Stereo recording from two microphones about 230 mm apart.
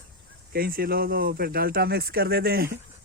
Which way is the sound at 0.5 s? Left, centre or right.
Right.